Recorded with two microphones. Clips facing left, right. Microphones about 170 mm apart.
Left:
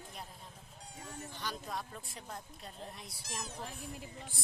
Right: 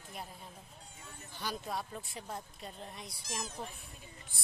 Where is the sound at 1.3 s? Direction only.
10° right (ahead or behind).